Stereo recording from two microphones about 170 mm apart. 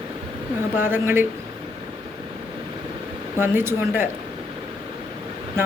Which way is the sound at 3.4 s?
15° right (ahead or behind).